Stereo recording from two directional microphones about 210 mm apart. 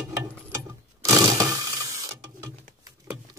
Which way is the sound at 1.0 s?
15° right (ahead or behind).